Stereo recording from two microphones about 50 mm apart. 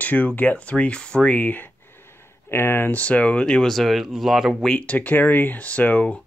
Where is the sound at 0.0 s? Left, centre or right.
Left.